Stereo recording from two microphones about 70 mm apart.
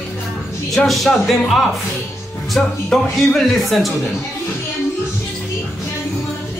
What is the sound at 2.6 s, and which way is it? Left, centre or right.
A man's voice, centre.